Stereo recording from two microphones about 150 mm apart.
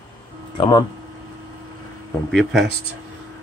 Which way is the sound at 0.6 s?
30° left (ahead or behind).